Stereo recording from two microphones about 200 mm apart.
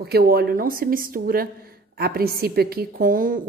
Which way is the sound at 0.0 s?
50° right (ahead or behind).